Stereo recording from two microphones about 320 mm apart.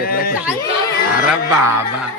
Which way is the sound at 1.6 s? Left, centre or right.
Centre.